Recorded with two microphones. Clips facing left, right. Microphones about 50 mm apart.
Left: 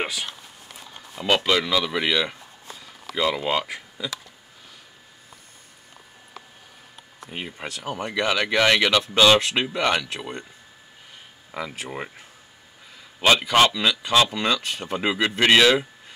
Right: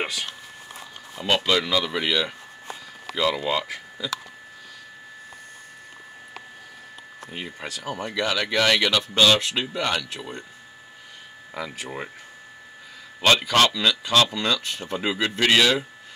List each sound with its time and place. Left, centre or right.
0.0 s a sound: centre
1.2 s speech: centre
7.2 s speech: centre
11.6 s speech: centre
13.2 s speech: centre